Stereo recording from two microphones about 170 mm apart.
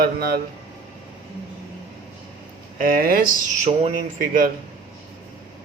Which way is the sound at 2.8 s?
60° right (ahead or behind).